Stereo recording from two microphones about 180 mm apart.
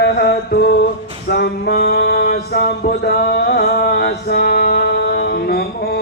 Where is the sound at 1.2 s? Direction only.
60° left (ahead or behind).